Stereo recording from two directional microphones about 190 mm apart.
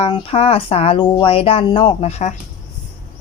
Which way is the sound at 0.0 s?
30° left (ahead or behind).